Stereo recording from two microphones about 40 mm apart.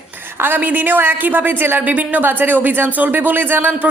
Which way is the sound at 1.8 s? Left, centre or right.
Right.